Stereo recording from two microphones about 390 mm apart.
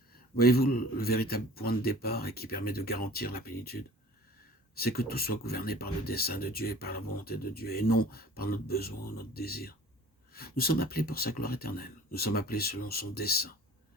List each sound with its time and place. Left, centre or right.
0.3 s speech: left
4.8 s speech: left